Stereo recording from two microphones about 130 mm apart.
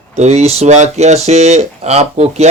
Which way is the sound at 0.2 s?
55° right (ahead or behind).